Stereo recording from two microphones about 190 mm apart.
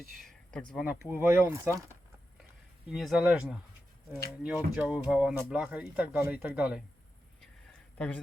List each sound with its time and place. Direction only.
0.2 s a sound: centre (ahead or behind)
0.7 s speech: 5° right (ahead or behind)
2.8 s speech: centre (ahead or behind)
7.9 s speech: 5° left (ahead or behind)